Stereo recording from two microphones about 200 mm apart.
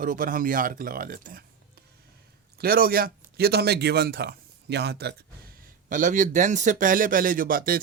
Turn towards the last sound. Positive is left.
turn(degrees=-45)  # may be behind; listen again after turning